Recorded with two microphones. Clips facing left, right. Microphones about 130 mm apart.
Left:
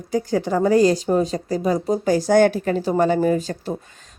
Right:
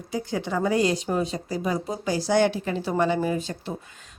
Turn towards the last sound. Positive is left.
turn(degrees=40)  # may be behind; listen again after turning